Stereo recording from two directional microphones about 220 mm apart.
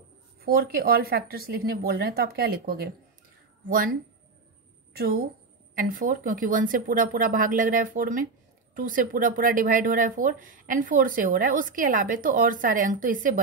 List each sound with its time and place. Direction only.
0.4 s speech: 45° right (ahead or behind)
4.9 s a woman's voice: 45° right (ahead or behind)